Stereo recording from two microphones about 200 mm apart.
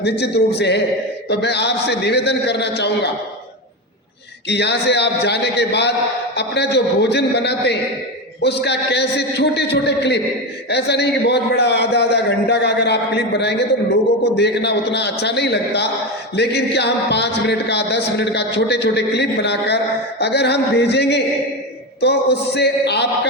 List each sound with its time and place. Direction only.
0.0 s a man's voice: 55° left (ahead or behind)
4.4 s a man's voice: 55° left (ahead or behind)